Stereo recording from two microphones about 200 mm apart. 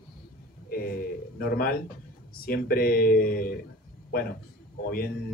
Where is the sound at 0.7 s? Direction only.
50° left (ahead or behind).